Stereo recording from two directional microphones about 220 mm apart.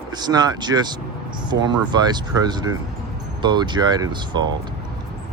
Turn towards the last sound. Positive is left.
turn(degrees=-20)  # may be behind; listen again after turning